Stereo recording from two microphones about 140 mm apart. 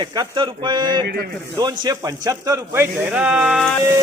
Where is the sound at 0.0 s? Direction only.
35° right (ahead or behind).